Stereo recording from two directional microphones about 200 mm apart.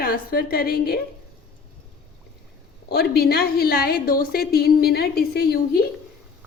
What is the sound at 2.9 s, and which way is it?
A woman's voice, 50° left (ahead or behind).